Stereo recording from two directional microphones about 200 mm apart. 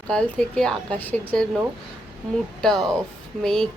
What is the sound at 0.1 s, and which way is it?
A woman's voice, 5° left (ahead or behind).